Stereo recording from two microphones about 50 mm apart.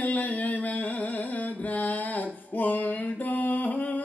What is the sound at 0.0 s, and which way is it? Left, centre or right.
Carnatic music, left.